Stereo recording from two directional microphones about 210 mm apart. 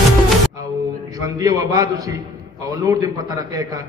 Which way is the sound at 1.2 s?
15° right (ahead or behind).